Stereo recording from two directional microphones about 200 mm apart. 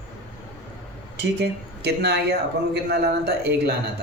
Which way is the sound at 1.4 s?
55° right (ahead or behind).